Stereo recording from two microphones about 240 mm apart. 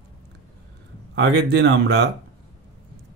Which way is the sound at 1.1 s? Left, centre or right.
Right.